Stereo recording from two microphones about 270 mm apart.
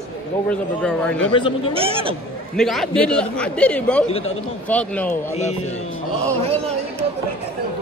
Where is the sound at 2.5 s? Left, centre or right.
Centre.